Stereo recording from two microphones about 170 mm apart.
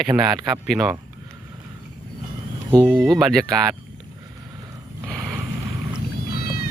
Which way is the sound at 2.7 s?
15° right (ahead or behind).